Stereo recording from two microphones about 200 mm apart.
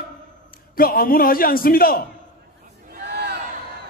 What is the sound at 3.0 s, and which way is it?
Crowd, 55° right (ahead or behind).